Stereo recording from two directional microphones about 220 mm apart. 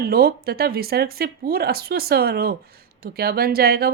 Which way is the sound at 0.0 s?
45° right (ahead or behind).